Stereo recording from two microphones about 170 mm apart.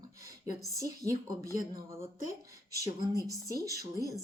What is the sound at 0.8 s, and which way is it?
Speech, 20° right (ahead or behind).